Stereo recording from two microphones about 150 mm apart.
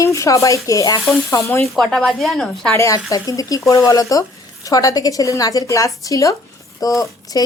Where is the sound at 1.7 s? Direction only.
Centre (ahead or behind).